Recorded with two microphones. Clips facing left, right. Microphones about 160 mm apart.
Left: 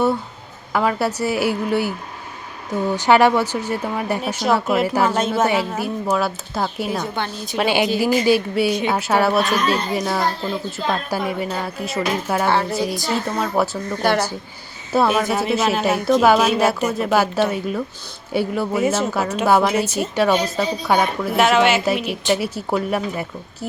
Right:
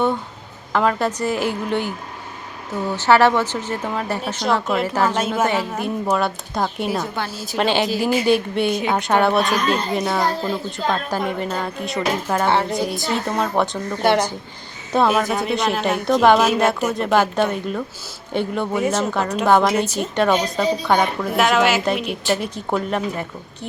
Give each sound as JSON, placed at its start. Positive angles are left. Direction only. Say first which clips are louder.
{"t": 0.7, "sound": "speech", "louder": "even", "side_deg": 5}
{"t": 2.9, "sound": "speech", "louder": "even", "side_deg": 15}
{"t": 7.6, "sound": "speech", "louder": "even", "side_deg": 10}
{"t": 7.9, "sound": "speech", "louder": "left 1 dB", "side_deg": 0}
{"t": 12.5, "sound": "a woman's voice", "louder": "right 1 dB", "side_deg": -20}
{"t": 13.2, "sound": "speech", "louder": "right 1 dB", "side_deg": 0}
{"t": 14.0, "sound": "a woman's voice", "louder": "right 2 dB", "side_deg": -25}
{"t": 14.9, "sound": "speech", "louder": "even", "side_deg": 5}